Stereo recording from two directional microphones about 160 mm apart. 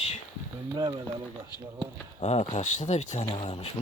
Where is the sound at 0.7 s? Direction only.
25° right (ahead or behind).